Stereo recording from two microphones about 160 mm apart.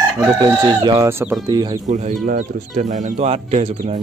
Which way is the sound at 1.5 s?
25° right (ahead or behind).